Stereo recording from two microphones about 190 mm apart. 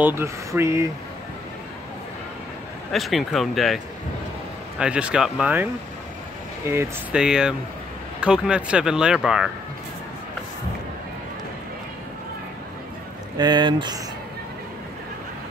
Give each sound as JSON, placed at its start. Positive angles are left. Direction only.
{"t": 0.0, "sound": "speech", "side_deg": -15}
{"t": 2.9, "sound": "speech", "side_deg": 0}
{"t": 13.4, "sound": "speech", "side_deg": -25}